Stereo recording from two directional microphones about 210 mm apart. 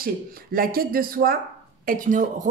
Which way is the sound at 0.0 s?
45° right (ahead or behind).